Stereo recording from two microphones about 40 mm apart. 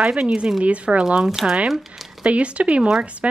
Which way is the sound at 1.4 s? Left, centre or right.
Centre.